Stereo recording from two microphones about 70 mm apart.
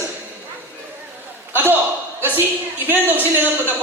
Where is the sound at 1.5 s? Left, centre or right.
Right.